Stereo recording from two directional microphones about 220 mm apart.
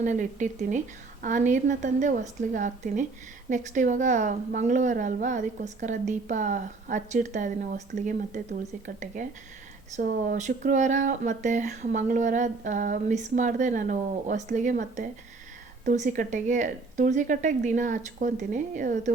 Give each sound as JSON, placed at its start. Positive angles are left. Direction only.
{"t": 0.0, "sound": "speech", "side_deg": -35}
{"t": 9.9, "sound": "speech", "side_deg": -40}